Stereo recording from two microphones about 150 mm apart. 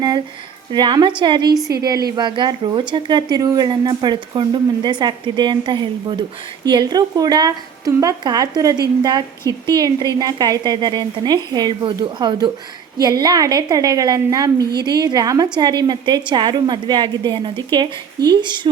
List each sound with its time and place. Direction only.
0.7 s a woman's voice: 30° right (ahead or behind)